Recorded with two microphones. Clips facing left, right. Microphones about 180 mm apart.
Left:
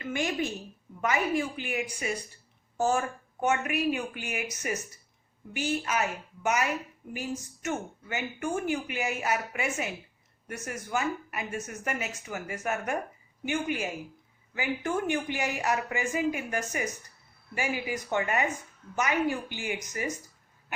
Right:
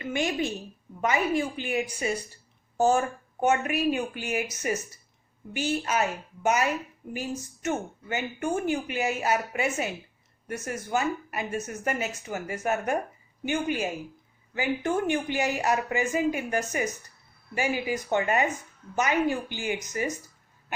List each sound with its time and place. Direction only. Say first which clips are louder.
0.0 s a woman's voice: right 2 dB; 20° right (ahead or behind)